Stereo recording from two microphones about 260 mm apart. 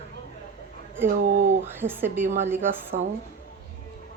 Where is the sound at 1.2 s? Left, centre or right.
Right.